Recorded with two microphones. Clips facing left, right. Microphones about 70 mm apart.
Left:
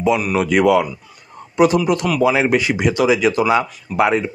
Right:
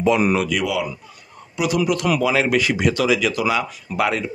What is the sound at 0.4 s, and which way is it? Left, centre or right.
Speech, left.